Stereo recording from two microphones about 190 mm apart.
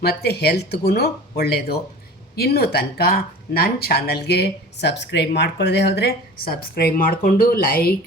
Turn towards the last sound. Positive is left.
turn(degrees=50)  # may be behind; listen again after turning